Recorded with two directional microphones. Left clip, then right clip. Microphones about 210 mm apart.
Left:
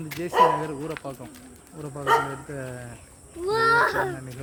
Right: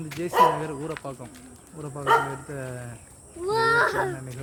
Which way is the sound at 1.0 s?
5° right (ahead or behind).